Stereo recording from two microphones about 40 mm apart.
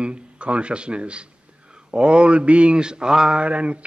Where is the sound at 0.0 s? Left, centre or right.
Right.